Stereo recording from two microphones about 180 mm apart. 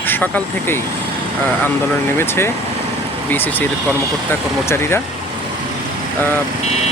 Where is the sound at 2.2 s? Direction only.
15° left (ahead or behind).